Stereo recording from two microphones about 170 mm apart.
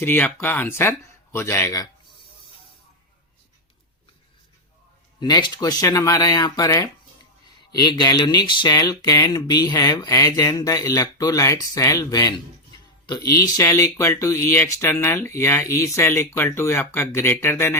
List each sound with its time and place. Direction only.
0.0 s speech: 15° left (ahead or behind)
5.2 s speech: 25° left (ahead or behind)